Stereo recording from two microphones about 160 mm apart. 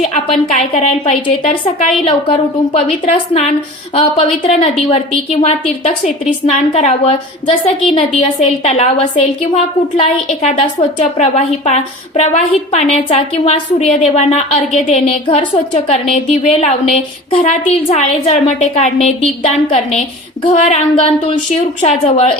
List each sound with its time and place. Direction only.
0.8 s a woman's voice: 40° left (ahead or behind)